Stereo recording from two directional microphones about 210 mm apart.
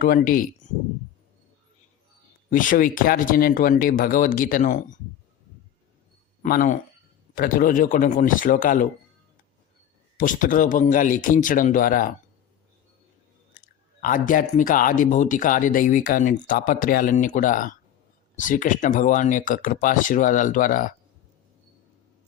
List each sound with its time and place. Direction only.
0.0 s speech: 40° left (ahead or behind)
2.5 s speech: 40° left (ahead or behind)
6.4 s speech: 40° left (ahead or behind)
10.2 s speech: 40° left (ahead or behind)
13.6 s chewing: 40° left (ahead or behind)
14.0 s speech: 40° left (ahead or behind)